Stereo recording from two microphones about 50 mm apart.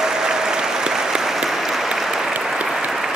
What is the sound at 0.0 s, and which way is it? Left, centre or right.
Applause, centre.